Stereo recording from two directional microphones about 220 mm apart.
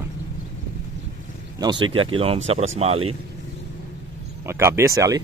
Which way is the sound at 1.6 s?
20° right (ahead or behind).